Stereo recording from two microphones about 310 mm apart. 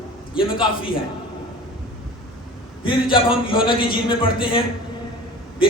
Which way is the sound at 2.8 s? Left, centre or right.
Centre.